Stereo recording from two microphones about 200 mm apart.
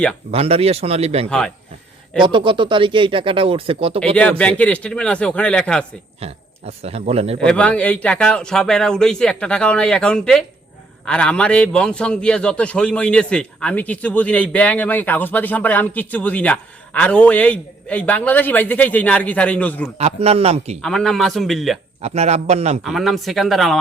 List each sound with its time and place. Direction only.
0.3 s a man's voice: 30° right (ahead or behind)
4.1 s a man's voice: 5° left (ahead or behind)
6.1 s a man's voice: 30° right (ahead or behind)
7.4 s a man's voice: 5° left (ahead or behind)
20.0 s a man's voice: 30° right (ahead or behind)
20.8 s a man's voice: centre (ahead or behind)
22.0 s a man's voice: 30° right (ahead or behind)
22.8 s a man's voice: centre (ahead or behind)